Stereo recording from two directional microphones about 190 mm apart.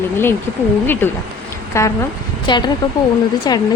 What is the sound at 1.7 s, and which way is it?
Speech, 15° left (ahead or behind).